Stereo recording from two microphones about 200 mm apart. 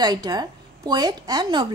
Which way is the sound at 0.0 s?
20° right (ahead or behind).